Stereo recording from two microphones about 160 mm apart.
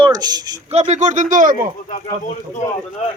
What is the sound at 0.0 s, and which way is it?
Speech, 25° right (ahead or behind).